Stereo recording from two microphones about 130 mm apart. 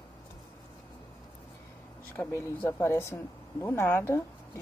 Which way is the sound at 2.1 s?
20° left (ahead or behind).